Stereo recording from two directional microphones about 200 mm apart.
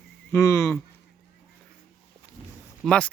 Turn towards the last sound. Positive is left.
turn(degrees=5)  # may be behind; listen again after turning